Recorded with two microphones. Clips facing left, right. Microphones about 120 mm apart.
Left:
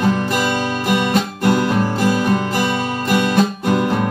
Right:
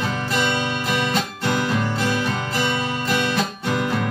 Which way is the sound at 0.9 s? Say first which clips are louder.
Left 8 dB; 15° left (ahead or behind).